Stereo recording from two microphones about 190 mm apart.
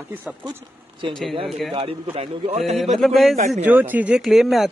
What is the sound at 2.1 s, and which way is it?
Speech, 35° right (ahead or behind).